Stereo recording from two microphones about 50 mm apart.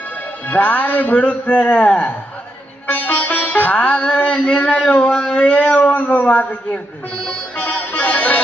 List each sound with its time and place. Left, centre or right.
0.4 s speech: left
2.8 s music: left
4.3 s speech: left
7.5 s music: left